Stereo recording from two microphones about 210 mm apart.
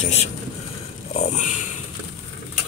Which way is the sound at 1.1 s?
35° left (ahead or behind).